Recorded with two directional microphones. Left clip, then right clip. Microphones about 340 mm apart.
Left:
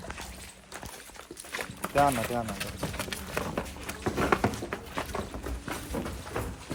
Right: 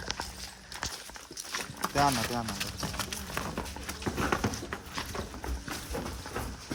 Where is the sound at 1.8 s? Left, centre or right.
Centre.